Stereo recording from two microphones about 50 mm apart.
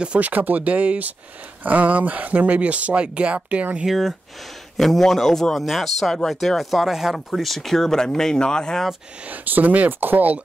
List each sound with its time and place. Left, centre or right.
0.2 s speech: right
3.8 s speech: centre
9.3 s speech: right